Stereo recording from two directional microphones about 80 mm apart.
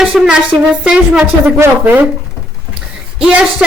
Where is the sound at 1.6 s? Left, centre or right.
Right.